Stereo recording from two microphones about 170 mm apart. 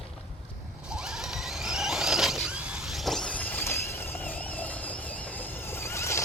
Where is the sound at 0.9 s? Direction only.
5° right (ahead or behind).